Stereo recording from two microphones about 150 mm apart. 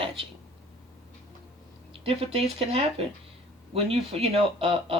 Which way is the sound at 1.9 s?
40° right (ahead or behind).